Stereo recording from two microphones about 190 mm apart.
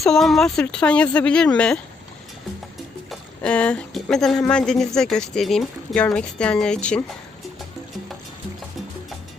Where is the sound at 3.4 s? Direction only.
5° left (ahead or behind).